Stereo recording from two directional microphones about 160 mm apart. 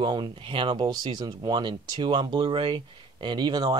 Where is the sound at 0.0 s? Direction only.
30° right (ahead or behind).